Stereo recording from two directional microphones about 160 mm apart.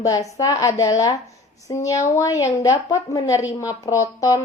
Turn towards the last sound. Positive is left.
turn(degrees=20)  # may be behind; listen again after turning